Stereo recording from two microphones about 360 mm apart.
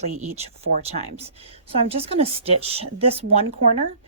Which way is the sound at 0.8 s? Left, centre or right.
Centre.